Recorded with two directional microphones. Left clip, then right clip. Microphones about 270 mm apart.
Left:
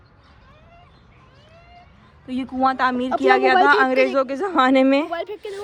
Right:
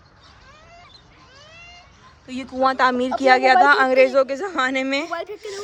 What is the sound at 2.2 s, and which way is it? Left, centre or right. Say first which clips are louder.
Speech: even; centre.